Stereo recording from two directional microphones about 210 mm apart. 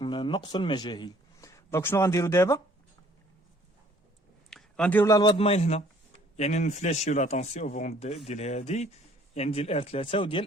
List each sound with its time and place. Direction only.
0.0 s a man's voice: 25° left (ahead or behind)
4.4 s a sound: 5° left (ahead or behind)
5.4 s speech: 30° left (ahead or behind)